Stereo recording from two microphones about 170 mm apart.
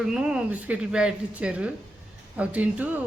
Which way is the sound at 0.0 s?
5° right (ahead or behind).